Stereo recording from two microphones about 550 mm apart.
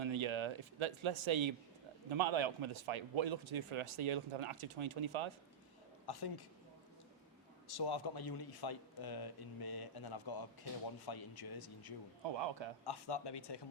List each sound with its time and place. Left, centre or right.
0.0 s a man's voice: right
6.1 s speech: left
7.7 s a man's voice: left
12.4 s speech: right
12.8 s speech: left